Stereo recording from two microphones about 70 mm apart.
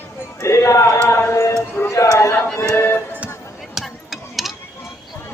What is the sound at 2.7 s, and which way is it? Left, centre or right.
Music, left.